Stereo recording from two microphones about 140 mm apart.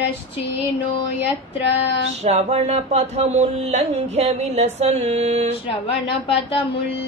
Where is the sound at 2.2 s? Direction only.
50° right (ahead or behind).